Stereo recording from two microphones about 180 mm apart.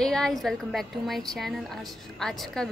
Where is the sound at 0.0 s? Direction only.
5° left (ahead or behind).